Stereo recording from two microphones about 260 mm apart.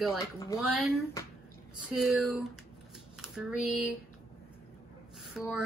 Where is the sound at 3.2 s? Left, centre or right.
Centre.